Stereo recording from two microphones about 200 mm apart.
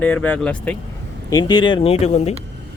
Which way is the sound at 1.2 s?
20° left (ahead or behind).